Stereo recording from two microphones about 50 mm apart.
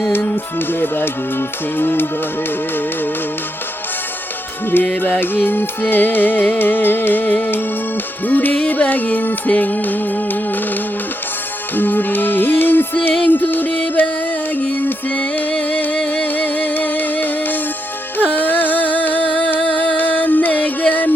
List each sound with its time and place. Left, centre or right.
0.7 s music: left
5.2 s music: left
11.8 s music: left